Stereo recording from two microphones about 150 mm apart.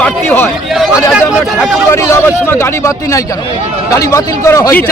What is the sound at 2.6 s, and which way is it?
A man's voice, 20° left (ahead or behind).